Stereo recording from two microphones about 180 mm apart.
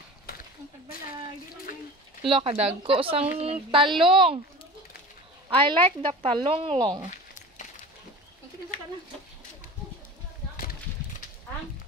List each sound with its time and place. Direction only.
2.2 s speech: 30° right (ahead or behind)
5.7 s speech: 30° right (ahead or behind)